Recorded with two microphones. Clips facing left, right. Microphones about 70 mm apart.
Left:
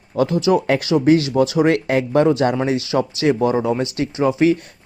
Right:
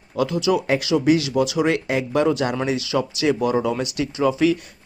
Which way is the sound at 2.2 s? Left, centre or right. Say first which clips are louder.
Left 4 dB; left.